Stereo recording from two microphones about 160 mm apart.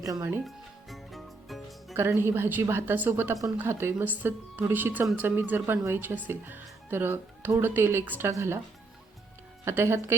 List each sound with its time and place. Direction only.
0.0 s speech: 20° right (ahead or behind)
0.4 s music: centre (ahead or behind)
1.9 s speech: 15° right (ahead or behind)
9.6 s speech: 15° right (ahead or behind)